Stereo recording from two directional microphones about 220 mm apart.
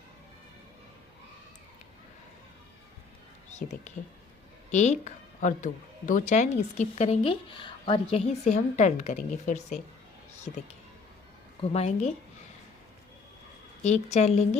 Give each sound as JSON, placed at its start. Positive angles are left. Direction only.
{"t": 3.5, "sound": "a woman's voice", "side_deg": 30}
{"t": 11.6, "sound": "a woman's voice", "side_deg": 30}
{"t": 13.8, "sound": "speech", "side_deg": 30}